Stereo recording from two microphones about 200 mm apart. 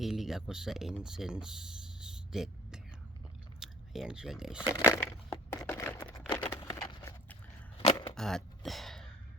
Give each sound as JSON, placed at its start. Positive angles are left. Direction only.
{"t": 0.0, "sound": "speech", "side_deg": 0}
{"t": 4.7, "sound": "a sound", "side_deg": 15}
{"t": 8.1, "sound": "throat clearing", "side_deg": 0}